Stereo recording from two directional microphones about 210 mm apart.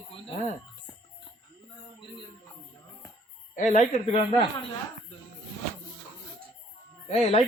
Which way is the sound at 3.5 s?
35° left (ahead or behind).